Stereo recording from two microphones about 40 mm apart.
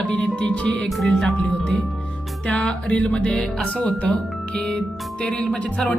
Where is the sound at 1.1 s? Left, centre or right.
Centre.